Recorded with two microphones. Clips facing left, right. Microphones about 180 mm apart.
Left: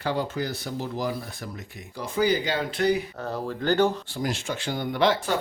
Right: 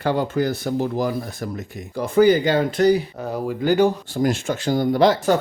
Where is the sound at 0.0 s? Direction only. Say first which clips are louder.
Right 7 dB; 55° right (ahead or behind); by 3.1 s 35° right (ahead or behind).